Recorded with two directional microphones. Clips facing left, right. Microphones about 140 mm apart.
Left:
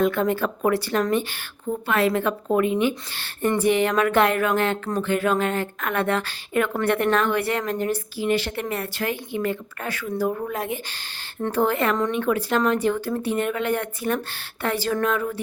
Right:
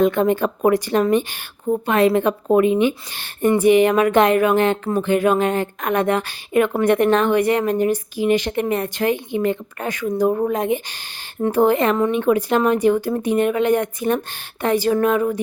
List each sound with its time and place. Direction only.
0.0 s a woman's voice: 20° right (ahead or behind)